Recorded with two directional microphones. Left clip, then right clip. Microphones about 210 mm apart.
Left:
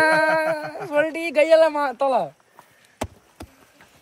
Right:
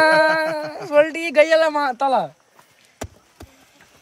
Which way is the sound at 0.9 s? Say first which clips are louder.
Right 5 dB; 50° right (ahead or behind).